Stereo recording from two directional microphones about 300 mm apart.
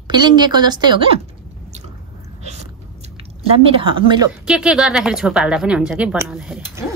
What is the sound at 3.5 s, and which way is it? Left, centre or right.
Speech, centre.